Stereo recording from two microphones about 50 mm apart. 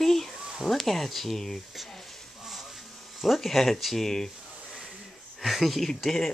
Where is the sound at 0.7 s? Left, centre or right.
Centre.